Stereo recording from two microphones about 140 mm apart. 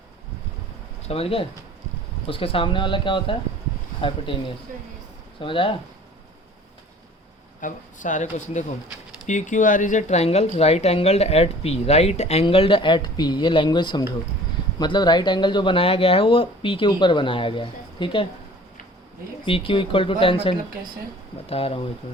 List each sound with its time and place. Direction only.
1.0 s speech: 45° left (ahead or behind)
7.6 s speech: 65° left (ahead or behind); by 18.3 s 35° left (ahead or behind)
19.5 s speech: 40° left (ahead or behind)